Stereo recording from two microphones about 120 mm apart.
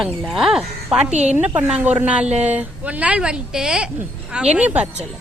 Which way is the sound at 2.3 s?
70° right (ahead or behind).